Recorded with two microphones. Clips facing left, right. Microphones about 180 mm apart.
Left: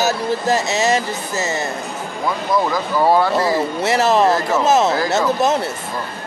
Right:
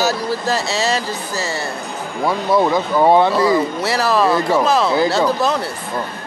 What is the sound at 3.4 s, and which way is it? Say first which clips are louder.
A man's voice: right 2 dB; 25° left (ahead or behind).